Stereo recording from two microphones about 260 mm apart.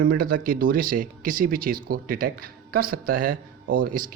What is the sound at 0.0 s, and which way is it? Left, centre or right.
Speech, right.